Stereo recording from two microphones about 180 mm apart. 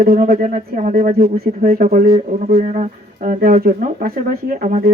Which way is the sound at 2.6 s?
45° right (ahead or behind).